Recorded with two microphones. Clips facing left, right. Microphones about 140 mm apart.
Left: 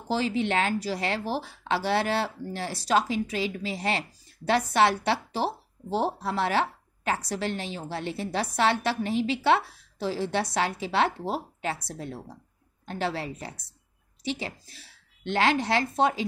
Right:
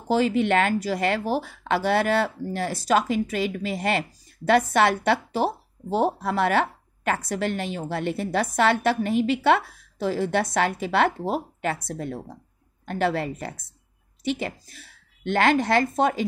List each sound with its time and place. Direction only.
0.1 s a woman's voice: 50° right (ahead or behind)